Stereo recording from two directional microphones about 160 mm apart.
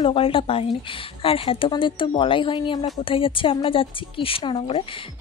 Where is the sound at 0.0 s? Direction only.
35° left (ahead or behind).